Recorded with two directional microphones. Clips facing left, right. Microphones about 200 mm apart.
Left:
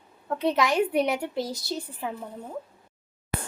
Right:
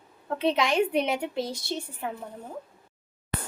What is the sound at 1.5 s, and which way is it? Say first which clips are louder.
Speech: left 1 dB; 25° right (ahead or behind).